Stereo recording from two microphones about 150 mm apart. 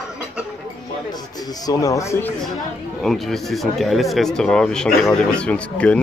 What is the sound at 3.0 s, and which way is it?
Speech, centre (ahead or behind).